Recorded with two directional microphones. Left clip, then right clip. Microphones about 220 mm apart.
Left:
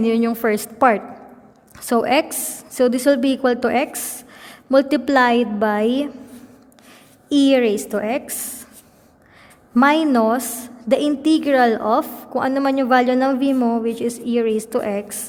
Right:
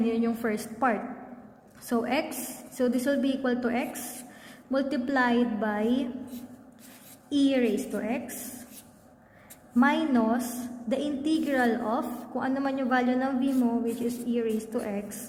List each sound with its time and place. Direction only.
0.0 s a woman's voice: 45° left (ahead or behind)
7.3 s a woman's voice: 45° left (ahead or behind)
9.7 s a woman's voice: 50° left (ahead or behind)